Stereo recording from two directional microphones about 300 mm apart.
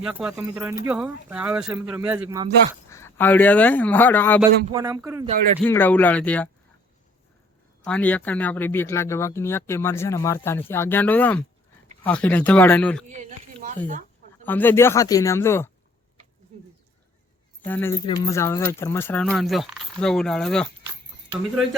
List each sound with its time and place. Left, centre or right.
0.0 s speech: centre
2.9 s speech: centre
4.7 s speech: centre
5.6 s speech: centre
7.9 s speech: centre
13.1 s a sound: right
14.4 s speech: centre
17.7 s speech: centre
20.8 s a sound: centre